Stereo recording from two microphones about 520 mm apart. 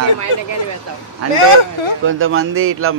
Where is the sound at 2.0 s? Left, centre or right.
Right.